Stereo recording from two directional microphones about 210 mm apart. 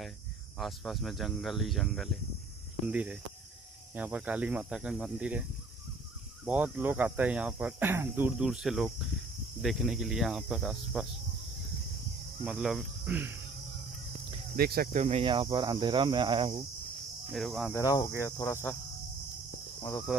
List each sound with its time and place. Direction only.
0.6 s speech: centre (ahead or behind)
6.4 s speech: 5° right (ahead or behind)
12.4 s speech: centre (ahead or behind)
14.6 s speech: 45° right (ahead or behind); by 16.6 s 25° right (ahead or behind)
17.3 s speech: centre (ahead or behind)
17.7 s speech: 15° left (ahead or behind)
19.8 s cricket: 10° left (ahead or behind)